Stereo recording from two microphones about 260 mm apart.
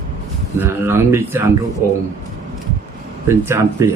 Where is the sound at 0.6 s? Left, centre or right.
Centre.